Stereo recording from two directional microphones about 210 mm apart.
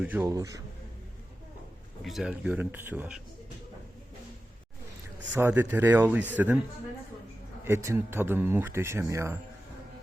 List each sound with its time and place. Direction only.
0.0 s speech: 10° right (ahead or behind)
2.0 s speech: centre (ahead or behind)
5.3 s speech: 10° right (ahead or behind)
7.6 s speech: 15° right (ahead or behind)